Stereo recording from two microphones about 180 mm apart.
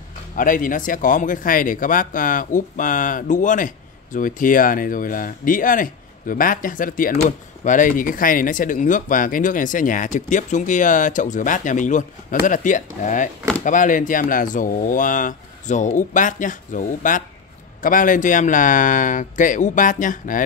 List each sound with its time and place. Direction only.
0.4 s speech: 50° left (ahead or behind)